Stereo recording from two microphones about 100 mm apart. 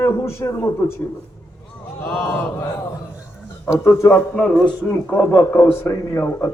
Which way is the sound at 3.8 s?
25° left (ahead or behind).